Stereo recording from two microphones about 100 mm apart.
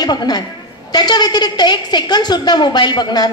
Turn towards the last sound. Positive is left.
turn(degrees=45)  # may be behind; listen again after turning